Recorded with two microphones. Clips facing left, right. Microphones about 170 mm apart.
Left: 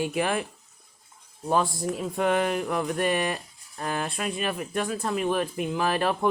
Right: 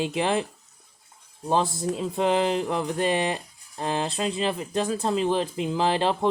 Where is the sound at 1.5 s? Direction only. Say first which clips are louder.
Right 1 dB; 25° right (ahead or behind).